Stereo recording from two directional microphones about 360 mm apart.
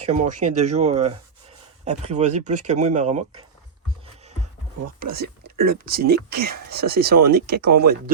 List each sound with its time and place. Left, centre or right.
0.0 s speech: centre
4.9 s speech: right